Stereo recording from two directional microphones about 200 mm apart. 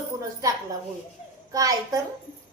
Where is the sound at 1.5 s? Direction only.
15° right (ahead or behind).